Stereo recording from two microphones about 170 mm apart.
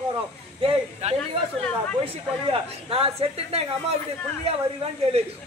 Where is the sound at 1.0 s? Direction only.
40° right (ahead or behind).